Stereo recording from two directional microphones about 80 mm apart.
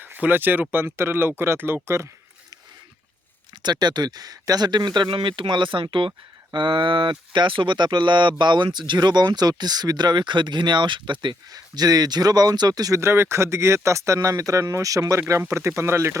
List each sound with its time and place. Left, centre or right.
0.0 s speech: right
3.6 s speech: right
11.5 s speech: right
13.0 s speech: right
15.3 s speech: right